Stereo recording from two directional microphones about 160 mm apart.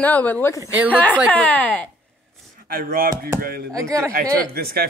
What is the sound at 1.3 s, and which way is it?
Speech, 10° left (ahead or behind).